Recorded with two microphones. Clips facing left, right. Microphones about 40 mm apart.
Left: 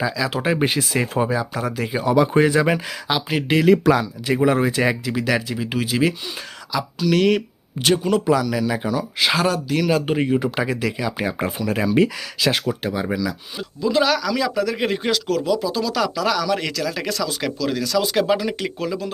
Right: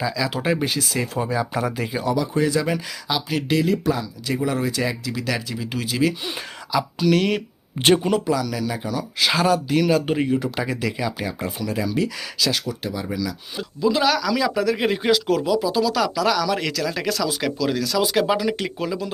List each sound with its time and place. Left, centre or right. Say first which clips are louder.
0.0 s speech: left 2 dB; centre
0.6 s speech: left 3 dB; left
1.5 s speech: right 1 dB; centre
1.8 s speech: left 2 dB; centre
2.1 s speech: left 8 dB; left
2.6 s speech: left 4 dB; left
4.3 s speech: left 5 dB; left; by 6.1 s centre
6.7 s speech: even; centre
7.8 s speech: right 2 dB; right
8.3 s speech: left 4 dB; centre
11.3 s speech: left 3 dB; left
13.6 s speech: left 1 dB; centre